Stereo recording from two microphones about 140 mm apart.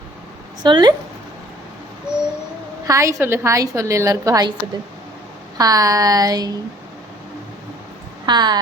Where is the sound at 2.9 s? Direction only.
20° right (ahead or behind).